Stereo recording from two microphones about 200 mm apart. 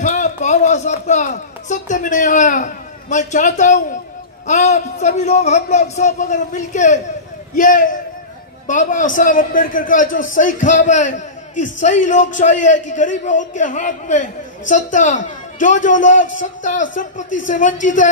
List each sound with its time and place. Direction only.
0.0 s a man's voice: 40° left (ahead or behind)